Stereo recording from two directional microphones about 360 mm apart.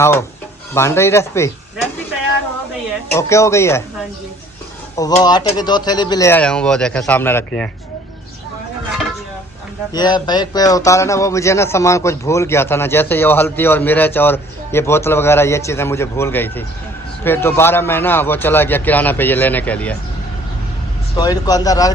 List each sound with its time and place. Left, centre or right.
0.0 s a man's voice: centre
3.1 s a man's voice: centre
4.9 s a man's voice: centre
9.9 s a man's voice: centre
21.2 s a man's voice: centre